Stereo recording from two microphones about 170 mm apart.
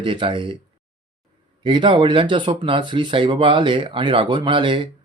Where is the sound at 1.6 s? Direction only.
30° right (ahead or behind).